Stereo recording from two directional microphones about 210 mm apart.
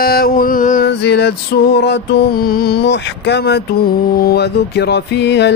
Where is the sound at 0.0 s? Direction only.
45° left (ahead or behind).